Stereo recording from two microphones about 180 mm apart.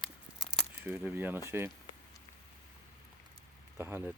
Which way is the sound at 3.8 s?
10° right (ahead or behind).